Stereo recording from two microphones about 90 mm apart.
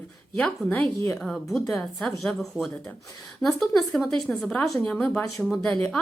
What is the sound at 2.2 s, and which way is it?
A woman's voice, 5° left (ahead or behind).